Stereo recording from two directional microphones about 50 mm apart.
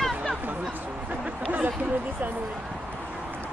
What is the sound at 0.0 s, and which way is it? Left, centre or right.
Chatter, centre.